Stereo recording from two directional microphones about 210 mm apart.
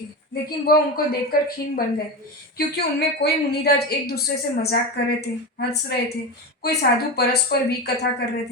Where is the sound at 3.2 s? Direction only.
50° left (ahead or behind).